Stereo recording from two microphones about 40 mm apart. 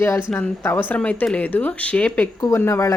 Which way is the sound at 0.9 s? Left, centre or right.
Left.